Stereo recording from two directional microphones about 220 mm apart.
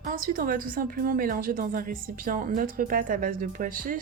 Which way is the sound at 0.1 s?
40° right (ahead or behind).